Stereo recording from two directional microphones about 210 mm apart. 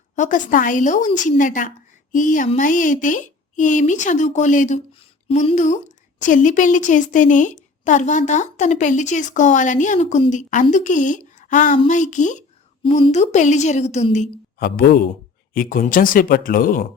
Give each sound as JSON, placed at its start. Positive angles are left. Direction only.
{"t": 0.2, "sound": "a woman's voice", "side_deg": 40}